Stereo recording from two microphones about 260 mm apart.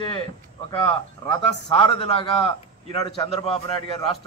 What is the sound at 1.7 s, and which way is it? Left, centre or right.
A man's voice, left.